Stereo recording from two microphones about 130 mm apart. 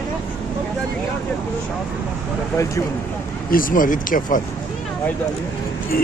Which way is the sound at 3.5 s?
90° left.